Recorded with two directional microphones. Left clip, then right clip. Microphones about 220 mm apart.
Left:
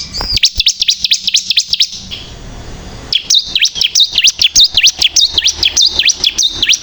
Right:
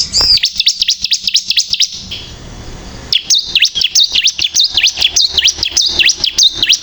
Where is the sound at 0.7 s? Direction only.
10° left (ahead or behind).